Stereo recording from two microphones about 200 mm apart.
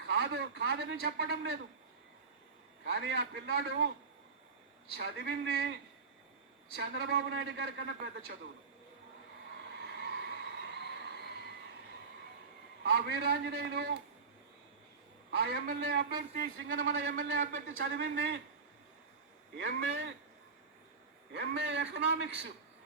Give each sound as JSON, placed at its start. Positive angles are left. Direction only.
{"t": 0.0, "sound": "a man's voice", "side_deg": -60}
{"t": 2.8, "sound": "a man's voice", "side_deg": -60}
{"t": 4.9, "sound": "a man's voice", "side_deg": -55}
{"t": 6.7, "sound": "a man's voice", "side_deg": -55}
{"t": 9.8, "sound": "a sound", "side_deg": -55}
{"t": 12.8, "sound": "a man's voice", "side_deg": -55}
{"t": 15.4, "sound": "a man's voice", "side_deg": -50}
{"t": 19.5, "sound": "a man's voice", "side_deg": -60}
{"t": 21.3, "sound": "a man's voice", "side_deg": -60}